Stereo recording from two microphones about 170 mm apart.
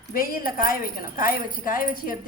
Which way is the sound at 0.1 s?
60° left (ahead or behind).